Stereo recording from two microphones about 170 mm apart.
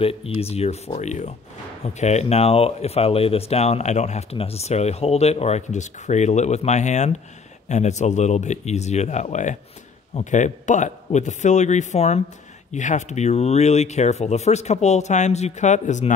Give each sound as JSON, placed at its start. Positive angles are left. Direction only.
{"t": 0.0, "sound": "speech", "side_deg": 35}